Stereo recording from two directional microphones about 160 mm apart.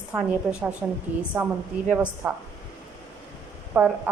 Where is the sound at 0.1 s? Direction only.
5° right (ahead or behind).